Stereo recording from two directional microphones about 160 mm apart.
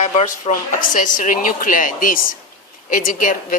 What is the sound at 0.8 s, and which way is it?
A woman's voice, 55° left (ahead or behind).